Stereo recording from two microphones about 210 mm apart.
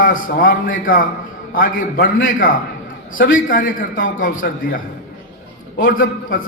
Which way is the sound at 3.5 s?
40° left (ahead or behind).